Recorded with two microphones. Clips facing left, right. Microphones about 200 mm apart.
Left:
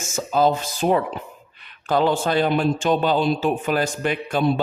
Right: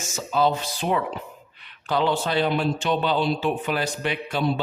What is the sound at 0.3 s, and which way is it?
A man's voice, 45° left (ahead or behind).